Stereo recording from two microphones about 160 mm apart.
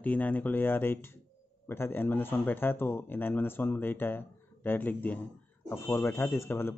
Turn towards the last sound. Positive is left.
turn(degrees=15)  # may be behind; listen again after turning